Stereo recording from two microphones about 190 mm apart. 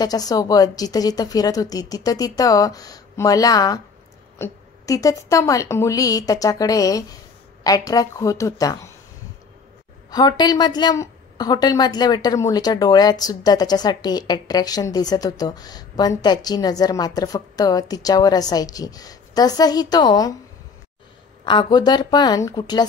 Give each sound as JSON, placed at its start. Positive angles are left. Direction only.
{"t": 0.0, "sound": "a woman's voice", "side_deg": 20}
{"t": 10.1, "sound": "a woman's voice", "side_deg": 20}
{"t": 21.5, "sound": "a woman's voice", "side_deg": 25}